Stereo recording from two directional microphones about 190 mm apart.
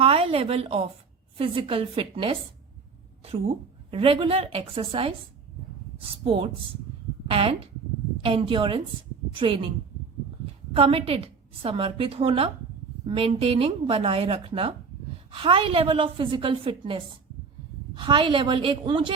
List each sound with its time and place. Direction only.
0.0 s a woman's voice: 30° right (ahead or behind)
3.9 s a woman's voice: 30° right (ahead or behind)